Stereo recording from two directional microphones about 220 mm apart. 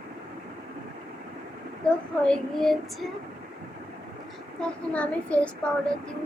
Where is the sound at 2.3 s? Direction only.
Centre (ahead or behind).